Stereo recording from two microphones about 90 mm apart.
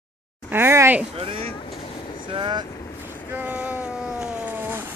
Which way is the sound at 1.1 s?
90° right.